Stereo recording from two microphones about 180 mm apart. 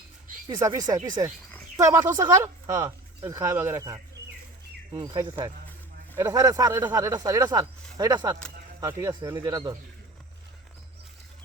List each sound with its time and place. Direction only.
0.4 s speech: 20° right (ahead or behind)